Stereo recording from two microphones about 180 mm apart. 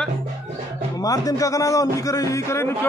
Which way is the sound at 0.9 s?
20° left (ahead or behind).